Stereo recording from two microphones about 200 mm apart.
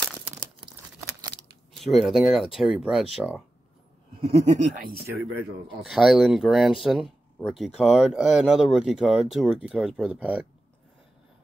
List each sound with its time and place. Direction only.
1.8 s speech: centre (ahead or behind)
4.2 s speech: 30° right (ahead or behind); by 5.1 s 50° right (ahead or behind)
5.8 s speech: centre (ahead or behind)